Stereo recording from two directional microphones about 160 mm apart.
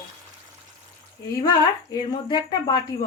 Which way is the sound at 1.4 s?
25° left (ahead or behind).